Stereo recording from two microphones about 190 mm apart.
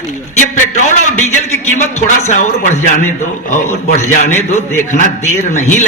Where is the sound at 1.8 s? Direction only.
40° left (ahead or behind).